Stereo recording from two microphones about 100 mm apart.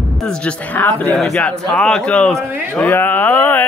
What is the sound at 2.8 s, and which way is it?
Speech, 20° left (ahead or behind).